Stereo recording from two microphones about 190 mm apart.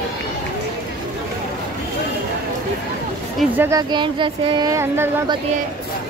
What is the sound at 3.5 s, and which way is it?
Speech, 15° right (ahead or behind).